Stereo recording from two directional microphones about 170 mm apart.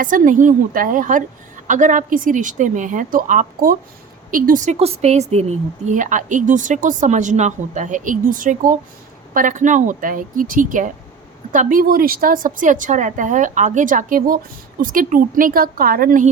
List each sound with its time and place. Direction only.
0.0 s speech: 50° right (ahead or behind)